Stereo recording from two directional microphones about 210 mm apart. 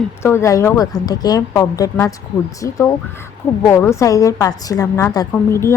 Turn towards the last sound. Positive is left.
turn(degrees=15)  # may be behind; listen again after turning